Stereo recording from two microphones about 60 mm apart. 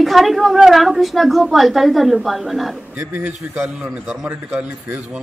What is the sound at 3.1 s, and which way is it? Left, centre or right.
Speech, right.